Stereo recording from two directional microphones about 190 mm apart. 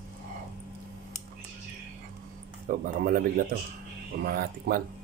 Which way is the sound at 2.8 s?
45° right (ahead or behind).